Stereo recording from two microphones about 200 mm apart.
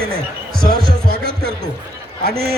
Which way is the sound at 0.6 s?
45° right (ahead or behind).